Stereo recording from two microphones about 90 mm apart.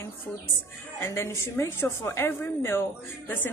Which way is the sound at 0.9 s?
25° left (ahead or behind).